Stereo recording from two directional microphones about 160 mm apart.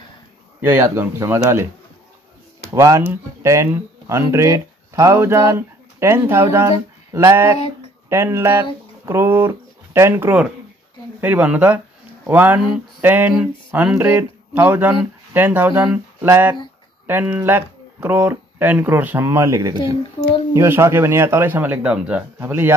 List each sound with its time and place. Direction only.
0.6 s speech: 15° right (ahead or behind)
2.7 s speech: 20° right (ahead or behind)